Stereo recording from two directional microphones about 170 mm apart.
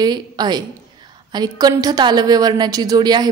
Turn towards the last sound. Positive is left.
turn(degrees=-25)  # may be behind; listen again after turning